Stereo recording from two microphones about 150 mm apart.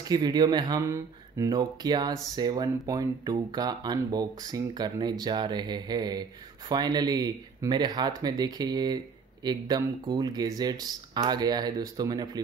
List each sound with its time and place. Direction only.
0.1 s speech: 25° right (ahead or behind)